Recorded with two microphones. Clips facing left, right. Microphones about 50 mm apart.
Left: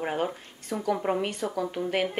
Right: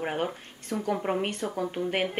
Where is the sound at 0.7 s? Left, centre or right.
Right.